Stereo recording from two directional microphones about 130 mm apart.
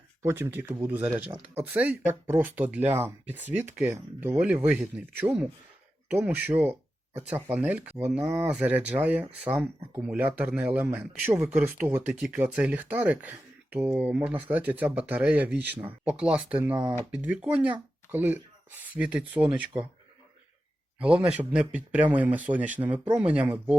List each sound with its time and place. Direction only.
0.2 s speech: 20° right (ahead or behind)
21.0 s speech: 10° right (ahead or behind)